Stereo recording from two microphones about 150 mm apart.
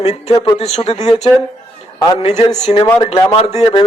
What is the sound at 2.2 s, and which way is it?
Speech, 45° left (ahead or behind).